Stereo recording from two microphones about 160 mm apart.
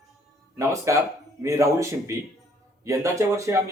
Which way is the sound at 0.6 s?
20° right (ahead or behind).